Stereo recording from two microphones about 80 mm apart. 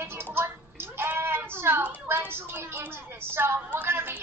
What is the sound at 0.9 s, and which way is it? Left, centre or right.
Bleat, right.